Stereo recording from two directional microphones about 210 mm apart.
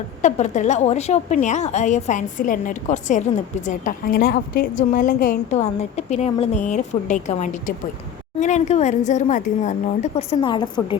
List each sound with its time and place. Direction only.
0.2 s a woman's voice: 35° left (ahead or behind)